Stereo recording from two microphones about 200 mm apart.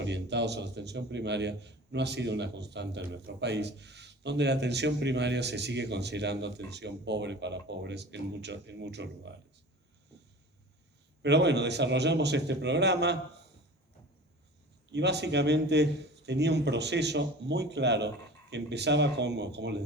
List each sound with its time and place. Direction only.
0.0 s a man's voice: 60° right (ahead or behind)
11.2 s a man's voice: 60° right (ahead or behind)
14.9 s a man's voice: 60° right (ahead or behind)